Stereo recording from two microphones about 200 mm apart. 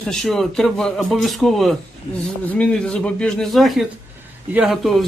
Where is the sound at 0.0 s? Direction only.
Centre (ahead or behind).